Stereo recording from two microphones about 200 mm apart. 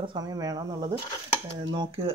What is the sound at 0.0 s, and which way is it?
Speech, 20° right (ahead or behind).